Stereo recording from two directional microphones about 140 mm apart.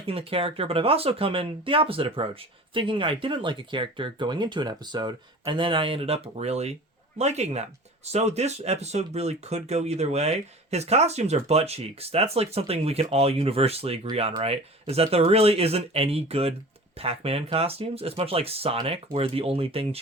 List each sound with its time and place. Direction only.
0.1 s speech: 40° right (ahead or behind)